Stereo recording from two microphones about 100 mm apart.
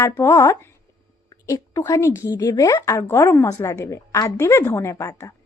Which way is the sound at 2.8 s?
25° left (ahead or behind).